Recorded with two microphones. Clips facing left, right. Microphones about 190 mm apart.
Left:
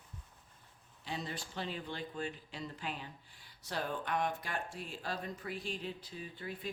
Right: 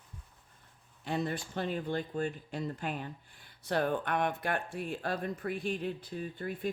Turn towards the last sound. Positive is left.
turn(degrees=-50)  # may be behind; listen again after turning